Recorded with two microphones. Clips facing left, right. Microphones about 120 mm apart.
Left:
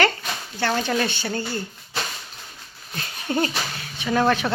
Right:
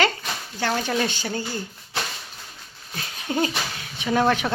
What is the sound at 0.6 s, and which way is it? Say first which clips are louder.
Speech: left 1 dB; 15° right (ahead or behind).